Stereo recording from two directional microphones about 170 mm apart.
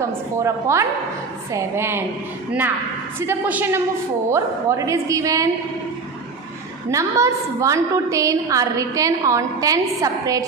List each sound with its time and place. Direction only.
0.4 s a woman's voice: 15° right (ahead or behind)
3.2 s a woman's voice: 10° right (ahead or behind)
6.9 s a woman's voice: 20° right (ahead or behind)